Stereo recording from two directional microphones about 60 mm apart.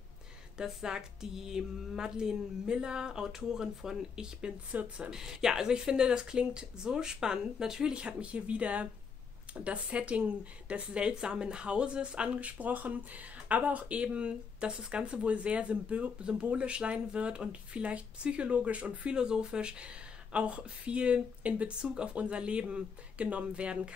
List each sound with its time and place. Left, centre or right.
0.6 s speech: centre
4.7 s speech: right
5.1 s speech: centre